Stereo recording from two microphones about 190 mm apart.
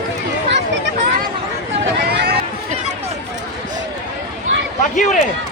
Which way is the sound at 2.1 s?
55° right (ahead or behind).